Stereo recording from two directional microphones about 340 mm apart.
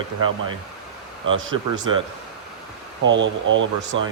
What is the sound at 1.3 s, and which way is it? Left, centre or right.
Speech, right.